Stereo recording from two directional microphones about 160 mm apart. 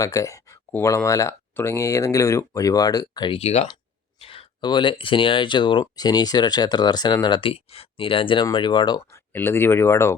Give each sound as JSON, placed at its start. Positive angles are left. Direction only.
{"t": 0.0, "sound": "speech", "side_deg": 20}
{"t": 9.1, "sound": "speech", "side_deg": 15}